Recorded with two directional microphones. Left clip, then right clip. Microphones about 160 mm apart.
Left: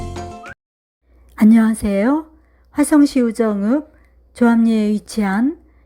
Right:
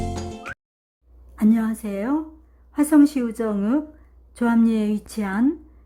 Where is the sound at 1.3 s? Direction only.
35° left (ahead or behind).